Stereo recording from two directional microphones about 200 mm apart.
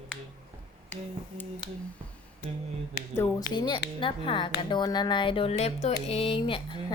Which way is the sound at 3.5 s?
20° left (ahead or behind).